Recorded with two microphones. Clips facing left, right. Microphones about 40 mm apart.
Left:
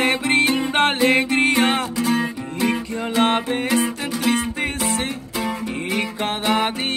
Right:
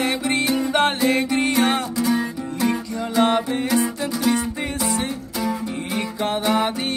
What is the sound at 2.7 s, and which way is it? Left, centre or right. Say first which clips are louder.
Music: left 1 dB; left.